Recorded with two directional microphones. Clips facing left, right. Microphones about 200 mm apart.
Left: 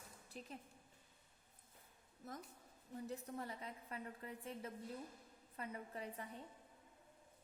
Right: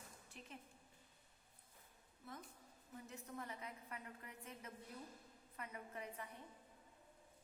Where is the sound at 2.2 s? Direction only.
40° left (ahead or behind).